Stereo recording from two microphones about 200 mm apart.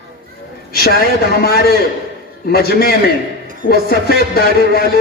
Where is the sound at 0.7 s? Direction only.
50° left (ahead or behind).